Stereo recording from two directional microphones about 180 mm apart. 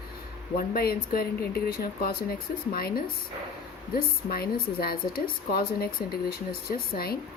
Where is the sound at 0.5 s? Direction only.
55° left (ahead or behind).